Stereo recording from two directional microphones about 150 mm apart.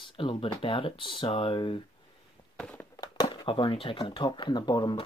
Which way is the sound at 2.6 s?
5° left (ahead or behind).